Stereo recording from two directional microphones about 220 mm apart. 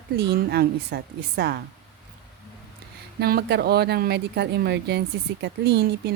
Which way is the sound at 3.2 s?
45° right (ahead or behind).